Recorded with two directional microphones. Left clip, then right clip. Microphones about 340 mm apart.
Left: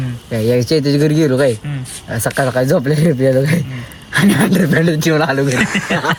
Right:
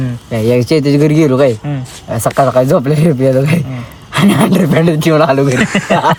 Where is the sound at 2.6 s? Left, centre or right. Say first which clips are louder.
Right 3 dB; centre.